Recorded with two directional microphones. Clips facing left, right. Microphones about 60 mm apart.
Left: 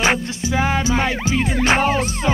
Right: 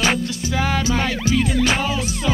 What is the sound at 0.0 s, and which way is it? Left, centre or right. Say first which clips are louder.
Music: left 1 dB; left.